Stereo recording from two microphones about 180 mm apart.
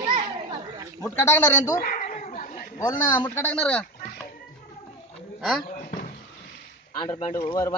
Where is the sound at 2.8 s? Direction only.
20° left (ahead or behind).